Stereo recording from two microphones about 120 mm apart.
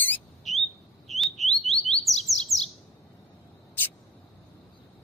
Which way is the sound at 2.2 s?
Centre (ahead or behind).